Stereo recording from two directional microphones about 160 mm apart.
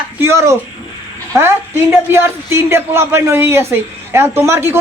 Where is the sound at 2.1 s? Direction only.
15° right (ahead or behind).